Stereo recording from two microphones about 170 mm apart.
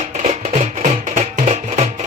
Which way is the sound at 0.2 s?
45° right (ahead or behind).